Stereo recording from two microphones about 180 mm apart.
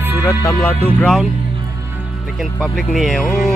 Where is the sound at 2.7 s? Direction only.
Centre (ahead or behind).